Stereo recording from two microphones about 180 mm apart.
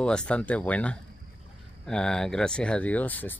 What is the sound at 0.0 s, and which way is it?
Speech, 5° left (ahead or behind).